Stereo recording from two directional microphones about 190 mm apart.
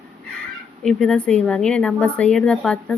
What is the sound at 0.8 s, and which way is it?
Speech, 5° left (ahead or behind).